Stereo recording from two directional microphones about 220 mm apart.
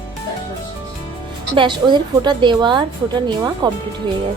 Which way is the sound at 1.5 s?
20° right (ahead or behind).